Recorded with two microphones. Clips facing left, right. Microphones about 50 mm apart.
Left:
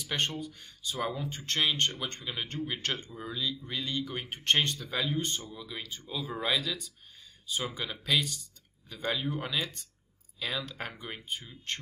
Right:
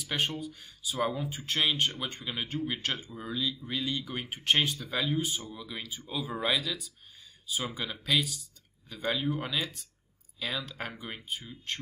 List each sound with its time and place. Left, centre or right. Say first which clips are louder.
0.0 s speech: right 1 dB; centre